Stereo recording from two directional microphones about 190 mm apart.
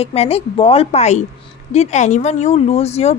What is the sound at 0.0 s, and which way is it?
Speech, 30° left (ahead or behind).